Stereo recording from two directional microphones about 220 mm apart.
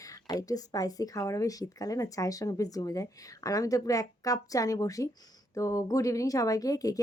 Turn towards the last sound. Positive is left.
turn(degrees=15)  # may be behind; listen again after turning